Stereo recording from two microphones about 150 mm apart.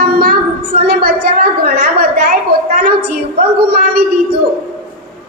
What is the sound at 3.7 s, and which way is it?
Child singing, 90° right.